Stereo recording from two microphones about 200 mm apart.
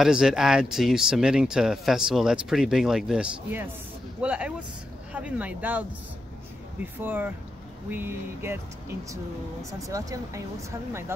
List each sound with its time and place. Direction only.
0.0 s speech: centre (ahead or behind)
7.0 s speech: 10° right (ahead or behind)